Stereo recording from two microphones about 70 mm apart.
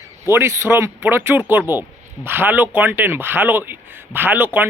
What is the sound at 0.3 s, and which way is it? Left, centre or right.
Speech, right.